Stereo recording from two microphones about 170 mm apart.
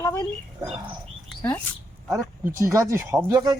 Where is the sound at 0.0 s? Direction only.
15° left (ahead or behind).